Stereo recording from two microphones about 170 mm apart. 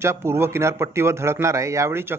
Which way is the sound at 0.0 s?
15° right (ahead or behind).